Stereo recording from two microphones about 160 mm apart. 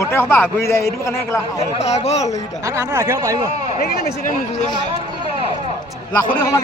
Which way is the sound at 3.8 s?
75° left (ahead or behind).